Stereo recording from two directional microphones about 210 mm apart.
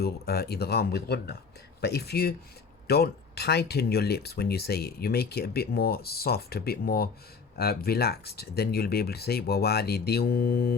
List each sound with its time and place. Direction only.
0.0 s speech: 50° left (ahead or behind)